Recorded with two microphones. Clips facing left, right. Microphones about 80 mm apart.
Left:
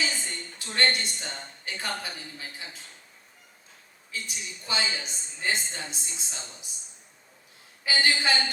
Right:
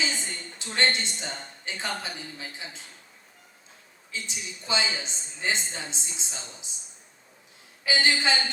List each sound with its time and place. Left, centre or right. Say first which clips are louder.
0.1 s a woman's voice: right 1 dB; right
4.1 s a woman's voice: right 1 dB; right
7.9 s a woman's voice: right 1 dB; right